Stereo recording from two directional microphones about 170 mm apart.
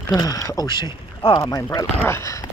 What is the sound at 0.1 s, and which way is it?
Speech, 20° left (ahead or behind).